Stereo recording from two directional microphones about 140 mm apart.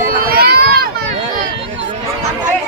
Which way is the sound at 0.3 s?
90° right.